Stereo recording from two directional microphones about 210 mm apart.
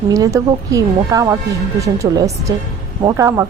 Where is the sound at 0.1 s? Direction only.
15° right (ahead or behind).